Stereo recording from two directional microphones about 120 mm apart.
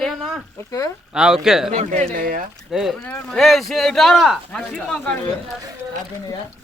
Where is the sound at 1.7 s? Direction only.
85° right.